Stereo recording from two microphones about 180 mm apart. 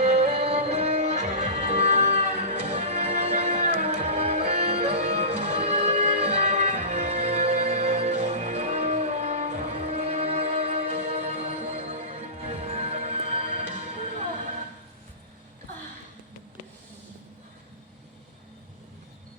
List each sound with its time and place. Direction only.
0.0 s music: 40° right (ahead or behind)